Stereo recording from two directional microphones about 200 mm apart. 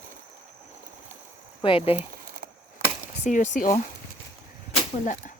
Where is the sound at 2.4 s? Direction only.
45° right (ahead or behind).